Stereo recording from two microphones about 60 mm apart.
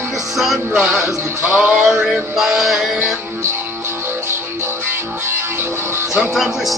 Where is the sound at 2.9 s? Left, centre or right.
Right.